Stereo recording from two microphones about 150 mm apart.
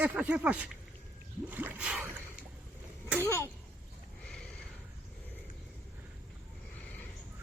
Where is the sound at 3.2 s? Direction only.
20° left (ahead or behind).